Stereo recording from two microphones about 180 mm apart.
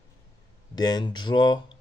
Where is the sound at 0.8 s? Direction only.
25° left (ahead or behind).